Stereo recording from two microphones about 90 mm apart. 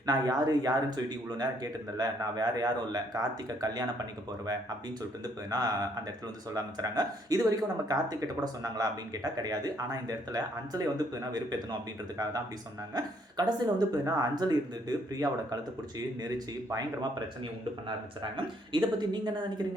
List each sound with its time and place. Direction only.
0.0 s speech: 45° right (ahead or behind)
5.5 s speech: 45° right (ahead or behind)
16.7 s speech: 50° right (ahead or behind)